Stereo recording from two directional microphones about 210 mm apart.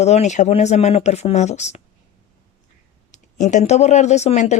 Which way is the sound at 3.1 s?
35° left (ahead or behind).